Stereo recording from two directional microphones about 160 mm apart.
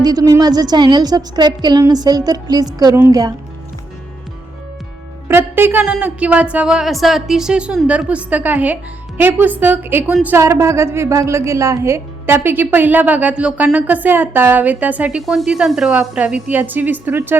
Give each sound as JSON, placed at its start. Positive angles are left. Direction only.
{"t": 0.0, "sound": "a woman's voice", "side_deg": -25}
{"t": 5.3, "sound": "a woman's voice", "side_deg": -15}